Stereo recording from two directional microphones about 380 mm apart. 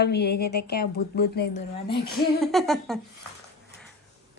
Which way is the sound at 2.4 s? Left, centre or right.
Centre.